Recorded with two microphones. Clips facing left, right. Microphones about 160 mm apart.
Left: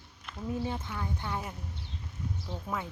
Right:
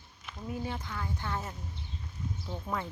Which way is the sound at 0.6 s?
25° left (ahead or behind).